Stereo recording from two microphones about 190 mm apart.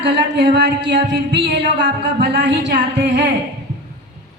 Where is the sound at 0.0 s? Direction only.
65° right (ahead or behind).